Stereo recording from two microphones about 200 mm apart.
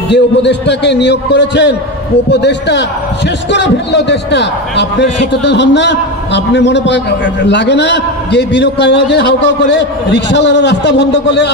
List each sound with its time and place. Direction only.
0.1 s a man's voice: 60° left (ahead or behind)